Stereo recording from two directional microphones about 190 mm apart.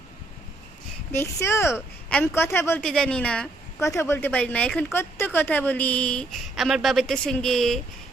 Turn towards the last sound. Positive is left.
turn(degrees=0)  # may be behind; listen again after turning